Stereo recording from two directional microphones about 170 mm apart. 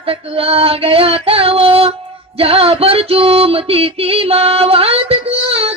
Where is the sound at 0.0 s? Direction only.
35° right (ahead or behind).